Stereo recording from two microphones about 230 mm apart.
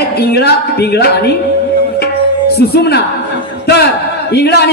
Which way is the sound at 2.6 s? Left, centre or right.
Left.